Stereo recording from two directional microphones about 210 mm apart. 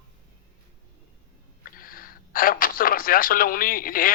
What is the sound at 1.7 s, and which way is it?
Speech, 45° left (ahead or behind).